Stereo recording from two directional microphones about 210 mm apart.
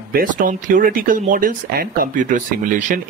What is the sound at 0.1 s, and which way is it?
Speech, 40° right (ahead or behind).